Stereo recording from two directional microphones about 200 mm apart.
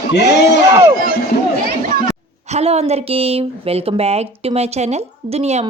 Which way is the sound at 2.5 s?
30° right (ahead or behind).